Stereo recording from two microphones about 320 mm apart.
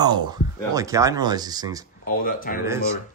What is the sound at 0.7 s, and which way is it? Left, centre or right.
Speech, centre.